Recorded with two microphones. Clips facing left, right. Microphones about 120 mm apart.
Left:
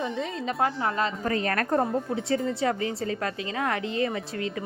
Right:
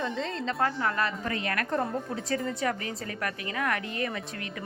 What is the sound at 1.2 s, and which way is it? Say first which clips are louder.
Speech: left 5 dB; 35° left (ahead or behind).